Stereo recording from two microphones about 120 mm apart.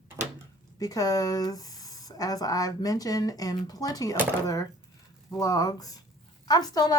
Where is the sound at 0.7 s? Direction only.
30° left (ahead or behind).